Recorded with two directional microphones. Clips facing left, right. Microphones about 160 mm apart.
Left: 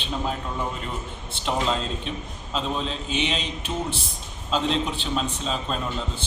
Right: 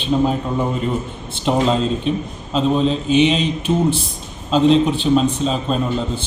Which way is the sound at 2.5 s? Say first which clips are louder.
Right 11 dB; 10° right (ahead or behind).